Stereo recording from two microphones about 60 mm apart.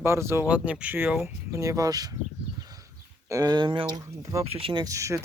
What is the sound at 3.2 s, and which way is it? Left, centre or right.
Speech, right.